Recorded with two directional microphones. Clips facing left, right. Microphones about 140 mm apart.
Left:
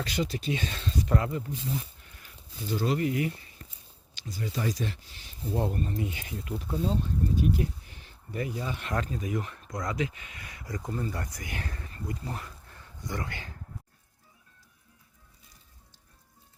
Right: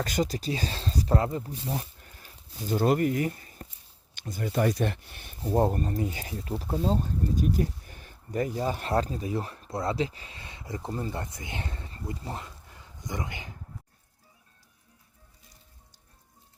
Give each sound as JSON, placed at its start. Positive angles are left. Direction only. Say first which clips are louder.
{"t": 0.0, "sound": "speech", "louder": "right 3 dB", "side_deg": -45}
{"t": 1.7, "sound": "a sound", "louder": "right 1 dB", "side_deg": -40}
{"t": 2.7, "sound": "speech", "louder": "right 4 dB", "side_deg": -50}
{"t": 5.4, "sound": "speech", "louder": "right 5 dB", "side_deg": -45}